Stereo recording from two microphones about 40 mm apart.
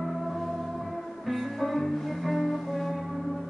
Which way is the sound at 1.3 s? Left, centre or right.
Centre.